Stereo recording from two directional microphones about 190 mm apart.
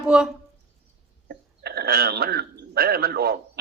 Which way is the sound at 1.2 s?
60° right (ahead or behind).